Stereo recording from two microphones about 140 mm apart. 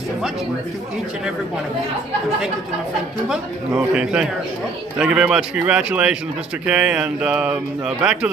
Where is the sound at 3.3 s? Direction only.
5° right (ahead or behind).